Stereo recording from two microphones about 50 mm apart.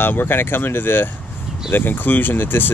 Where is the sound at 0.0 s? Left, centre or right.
Left.